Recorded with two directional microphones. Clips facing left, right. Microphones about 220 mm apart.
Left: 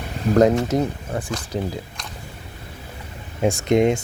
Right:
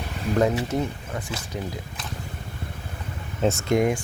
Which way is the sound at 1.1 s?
30° left (ahead or behind).